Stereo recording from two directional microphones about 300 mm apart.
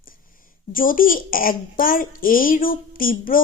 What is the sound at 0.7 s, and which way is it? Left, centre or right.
A woman's voice, left.